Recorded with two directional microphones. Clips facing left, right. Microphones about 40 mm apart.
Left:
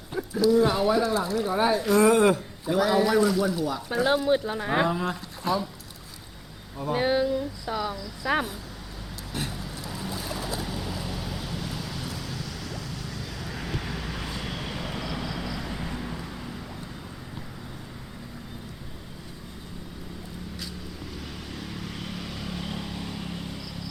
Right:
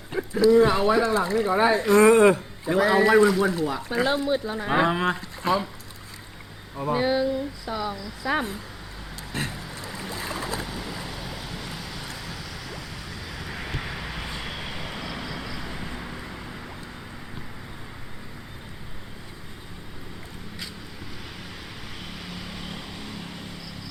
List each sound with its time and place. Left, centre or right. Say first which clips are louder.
0.1 s speech: right 4 dB; right
2.0 s speech: right 4 dB; right
4.5 s a sound: even; centre
4.9 s speech: right 4 dB; right
5.1 s speech: right 3 dB; right
6.9 s a sound: right 1 dB; centre
7.3 s speech: even; centre
9.3 s a sound: right 2 dB; right
10.8 s vehicle: left 1 dB; centre
21.5 s vehicle: left 3 dB; centre